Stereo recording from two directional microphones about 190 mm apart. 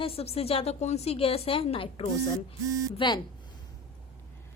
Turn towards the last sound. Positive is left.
turn(degrees=25)  # may be behind; listen again after turning